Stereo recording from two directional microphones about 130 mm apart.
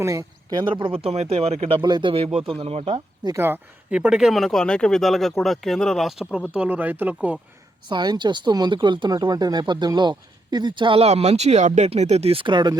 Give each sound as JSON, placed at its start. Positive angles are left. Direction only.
{"t": 0.0, "sound": "speech", "side_deg": -25}
{"t": 3.3, "sound": "speech", "side_deg": -15}
{"t": 7.9, "sound": "speech", "side_deg": -35}